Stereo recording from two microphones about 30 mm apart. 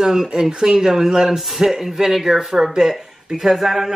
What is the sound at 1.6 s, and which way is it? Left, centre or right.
Speech, centre.